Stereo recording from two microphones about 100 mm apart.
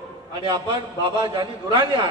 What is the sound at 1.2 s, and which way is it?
Speech, 40° right (ahead or behind).